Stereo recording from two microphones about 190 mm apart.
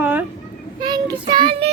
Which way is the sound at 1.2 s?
25° right (ahead or behind).